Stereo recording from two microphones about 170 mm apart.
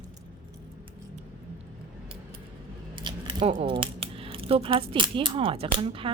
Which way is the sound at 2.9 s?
25° right (ahead or behind).